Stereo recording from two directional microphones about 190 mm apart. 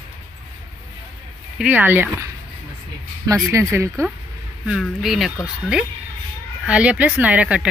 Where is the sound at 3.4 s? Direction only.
15° right (ahead or behind).